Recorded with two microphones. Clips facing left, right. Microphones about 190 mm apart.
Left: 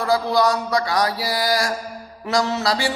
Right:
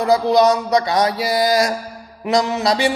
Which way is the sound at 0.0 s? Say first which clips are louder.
Right 5 dB; 20° right (ahead or behind).